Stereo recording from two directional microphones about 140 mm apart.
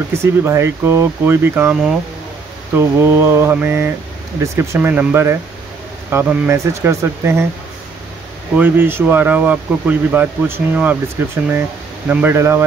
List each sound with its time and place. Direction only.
0.1 s speech: 20° right (ahead or behind)
8.5 s speech: 15° right (ahead or behind)